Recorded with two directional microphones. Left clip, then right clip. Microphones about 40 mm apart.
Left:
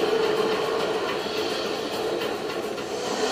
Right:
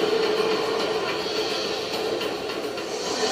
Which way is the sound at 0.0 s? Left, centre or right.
Right.